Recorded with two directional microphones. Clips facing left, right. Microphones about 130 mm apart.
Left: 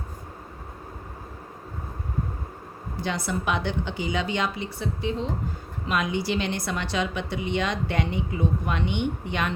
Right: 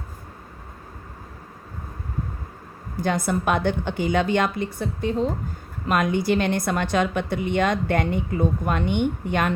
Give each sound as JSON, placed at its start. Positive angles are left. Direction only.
{"t": 3.0, "sound": "a woman's voice", "side_deg": -50}